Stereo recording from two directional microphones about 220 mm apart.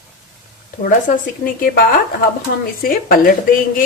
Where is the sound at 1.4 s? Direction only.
40° left (ahead or behind).